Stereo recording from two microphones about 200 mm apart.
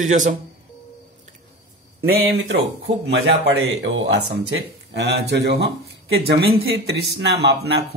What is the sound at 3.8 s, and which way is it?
A woman's voice, 70° right (ahead or behind).